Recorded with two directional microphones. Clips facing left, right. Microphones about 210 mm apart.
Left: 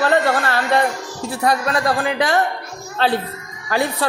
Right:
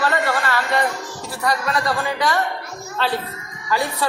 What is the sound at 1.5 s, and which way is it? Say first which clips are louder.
Speech: left 3 dB; 55° left (ahead or behind).